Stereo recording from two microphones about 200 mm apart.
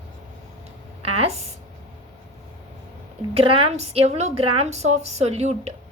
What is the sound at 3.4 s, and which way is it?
A woman's voice, 30° right (ahead or behind).